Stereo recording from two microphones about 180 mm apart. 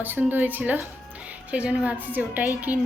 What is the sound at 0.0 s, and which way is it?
A woman's voice, 10° right (ahead or behind).